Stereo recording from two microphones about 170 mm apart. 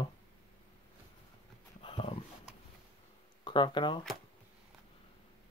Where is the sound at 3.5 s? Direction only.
30° left (ahead or behind).